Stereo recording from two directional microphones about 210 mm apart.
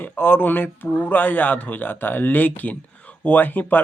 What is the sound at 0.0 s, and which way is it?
Speech, 10° left (ahead or behind).